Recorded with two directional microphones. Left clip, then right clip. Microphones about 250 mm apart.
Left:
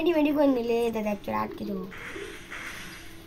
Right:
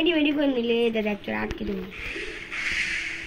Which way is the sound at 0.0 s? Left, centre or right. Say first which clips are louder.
Even; left.